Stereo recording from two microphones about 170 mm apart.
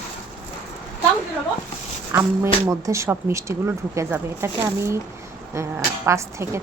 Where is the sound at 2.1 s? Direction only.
15° right (ahead or behind).